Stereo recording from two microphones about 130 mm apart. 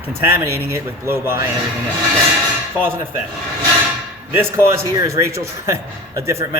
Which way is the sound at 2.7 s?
15° right (ahead or behind).